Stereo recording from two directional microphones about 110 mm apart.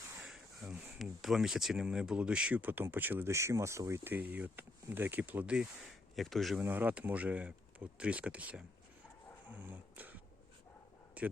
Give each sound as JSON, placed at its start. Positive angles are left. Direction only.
{"t": 0.2, "sound": "speech", "side_deg": -5}
{"t": 6.1, "sound": "speech", "side_deg": 0}
{"t": 6.6, "sound": "speech", "side_deg": -15}
{"t": 9.5, "sound": "dog", "side_deg": -15}
{"t": 11.2, "sound": "speech", "side_deg": -15}